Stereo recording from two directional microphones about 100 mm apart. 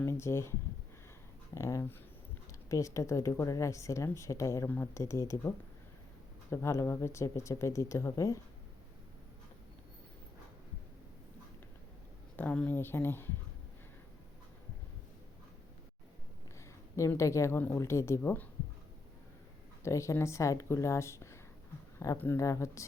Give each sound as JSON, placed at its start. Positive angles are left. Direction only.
{"t": 0.0, "sound": "speech", "side_deg": 25}
{"t": 1.5, "sound": "speech", "side_deg": 30}
{"t": 6.5, "sound": "speech", "side_deg": 25}
{"t": 12.4, "sound": "speech", "side_deg": 15}
{"t": 17.0, "sound": "speech", "side_deg": 30}
{"t": 19.8, "sound": "speech", "side_deg": 30}